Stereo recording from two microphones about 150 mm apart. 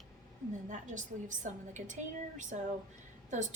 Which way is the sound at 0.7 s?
55° right (ahead or behind).